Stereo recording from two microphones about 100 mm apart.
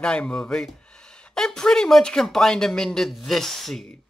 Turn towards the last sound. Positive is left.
turn(degrees=5)  # may be behind; listen again after turning